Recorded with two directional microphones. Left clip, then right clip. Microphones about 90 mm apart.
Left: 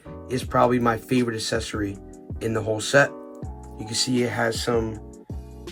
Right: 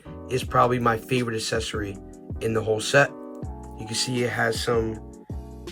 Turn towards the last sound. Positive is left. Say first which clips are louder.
# even
turn(degrees=-20)  # may be behind; listen again after turning